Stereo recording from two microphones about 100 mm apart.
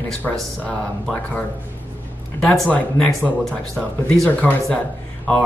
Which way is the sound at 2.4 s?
5° left (ahead or behind).